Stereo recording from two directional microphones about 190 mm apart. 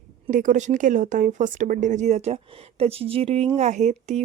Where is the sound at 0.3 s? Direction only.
40° right (ahead or behind).